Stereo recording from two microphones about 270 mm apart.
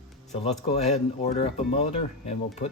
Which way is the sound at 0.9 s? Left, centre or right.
Left.